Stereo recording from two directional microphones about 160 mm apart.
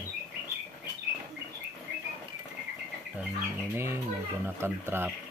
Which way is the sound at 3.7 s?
15° right (ahead or behind).